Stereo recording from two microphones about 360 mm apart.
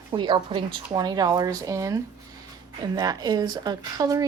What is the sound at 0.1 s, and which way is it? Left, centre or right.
Speech, centre.